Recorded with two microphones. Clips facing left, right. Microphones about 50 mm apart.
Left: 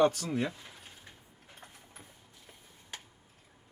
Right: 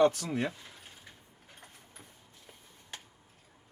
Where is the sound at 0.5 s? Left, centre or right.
Centre.